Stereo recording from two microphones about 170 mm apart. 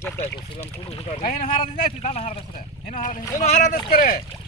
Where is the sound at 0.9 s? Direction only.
35° left (ahead or behind).